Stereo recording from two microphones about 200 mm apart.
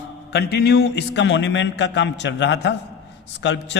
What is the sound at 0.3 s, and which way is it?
A man's voice, 55° left (ahead or behind).